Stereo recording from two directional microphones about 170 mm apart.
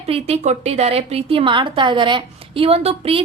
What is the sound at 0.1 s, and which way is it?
A woman's voice, 40° right (ahead or behind).